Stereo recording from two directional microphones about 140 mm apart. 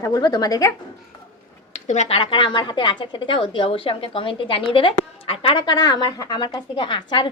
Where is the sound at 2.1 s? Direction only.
35° left (ahead or behind).